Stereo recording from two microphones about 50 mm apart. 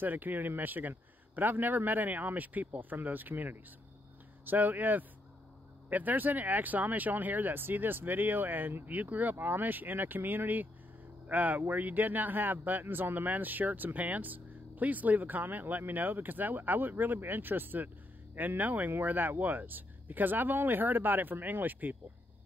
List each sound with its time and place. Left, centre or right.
0.0 s speech: right